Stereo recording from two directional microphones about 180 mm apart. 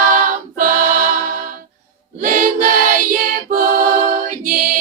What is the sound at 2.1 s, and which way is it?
Singing, 50° right (ahead or behind).